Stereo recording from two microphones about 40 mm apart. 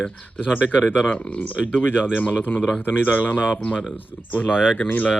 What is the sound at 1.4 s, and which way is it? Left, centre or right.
Speech, left.